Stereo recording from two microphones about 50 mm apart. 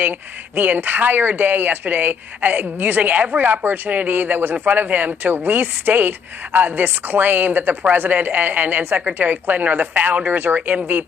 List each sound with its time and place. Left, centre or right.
0.0 s speech: right